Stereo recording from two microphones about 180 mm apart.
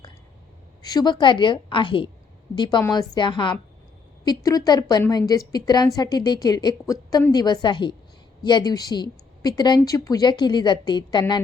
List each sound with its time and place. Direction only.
0.8 s a woman's voice: 20° left (ahead or behind)